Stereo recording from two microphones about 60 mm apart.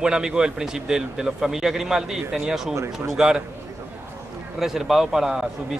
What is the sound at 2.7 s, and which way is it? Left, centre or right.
Speech, right.